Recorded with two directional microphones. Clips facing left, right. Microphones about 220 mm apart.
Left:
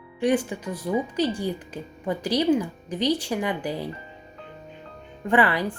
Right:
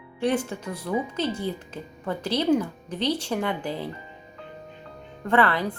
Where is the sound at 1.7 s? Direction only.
10° left (ahead or behind).